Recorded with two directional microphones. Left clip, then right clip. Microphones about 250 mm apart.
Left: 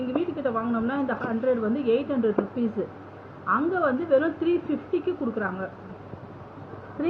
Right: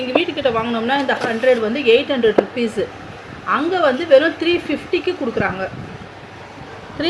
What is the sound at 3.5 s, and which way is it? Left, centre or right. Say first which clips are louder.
Speech: right 7 dB; right.